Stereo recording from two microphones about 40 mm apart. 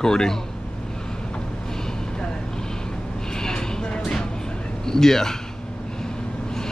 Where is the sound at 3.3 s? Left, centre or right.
Centre.